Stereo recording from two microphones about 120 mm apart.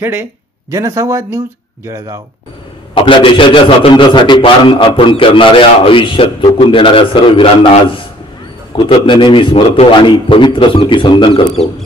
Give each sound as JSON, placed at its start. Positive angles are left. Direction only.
{"t": 0.0, "sound": "speech", "side_deg": -20}
{"t": 2.9, "sound": "a man's voice", "side_deg": 45}
{"t": 8.7, "sound": "a man's voice", "side_deg": 45}